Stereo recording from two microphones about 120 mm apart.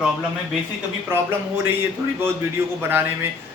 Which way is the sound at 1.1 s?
20° right (ahead or behind).